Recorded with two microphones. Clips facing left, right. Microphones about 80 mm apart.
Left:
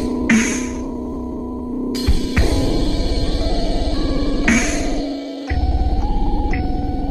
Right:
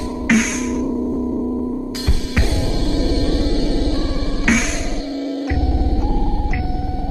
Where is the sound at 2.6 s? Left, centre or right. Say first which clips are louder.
Left 2 dB; right.